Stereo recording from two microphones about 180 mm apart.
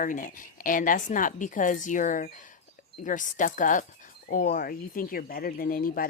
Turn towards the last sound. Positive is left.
turn(degrees=55)  # may be behind; listen again after turning